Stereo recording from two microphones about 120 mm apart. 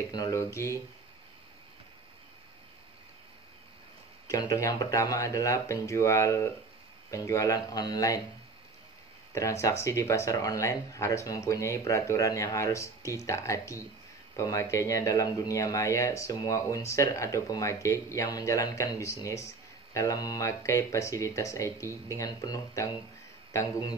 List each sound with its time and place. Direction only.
0.1 s speech: 30° left (ahead or behind)
4.3 s speech: 30° left (ahead or behind)
9.3 s speech: 25° left (ahead or behind)